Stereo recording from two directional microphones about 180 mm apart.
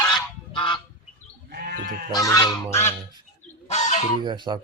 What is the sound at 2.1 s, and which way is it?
Speech, 20° left (ahead or behind).